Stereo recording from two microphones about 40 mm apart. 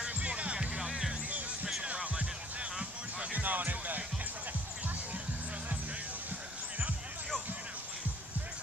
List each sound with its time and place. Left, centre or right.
0.2 s music: right
0.8 s music: centre
1.8 s music: right
3.3 s music: right